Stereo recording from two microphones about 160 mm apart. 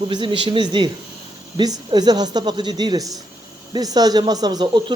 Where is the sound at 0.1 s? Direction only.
30° right (ahead or behind).